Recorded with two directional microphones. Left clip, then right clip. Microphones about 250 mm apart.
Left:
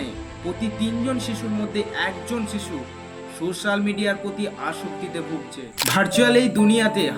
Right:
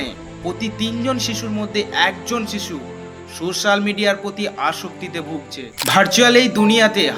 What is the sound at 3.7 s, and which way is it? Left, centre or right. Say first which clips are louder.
Speech: right 7 dB; centre.